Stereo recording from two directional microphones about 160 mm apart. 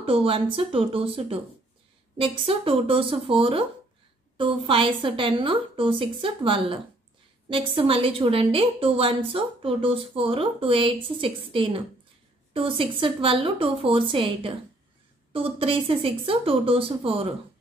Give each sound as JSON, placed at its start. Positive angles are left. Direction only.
{"t": 0.0, "sound": "a woman's voice", "side_deg": -35}